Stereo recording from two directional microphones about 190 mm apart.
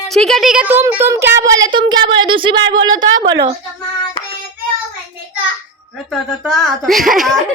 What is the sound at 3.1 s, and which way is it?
Speech, 75° right (ahead or behind).